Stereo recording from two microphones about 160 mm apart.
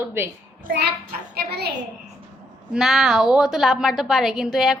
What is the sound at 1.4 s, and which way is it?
Speech, 80° right.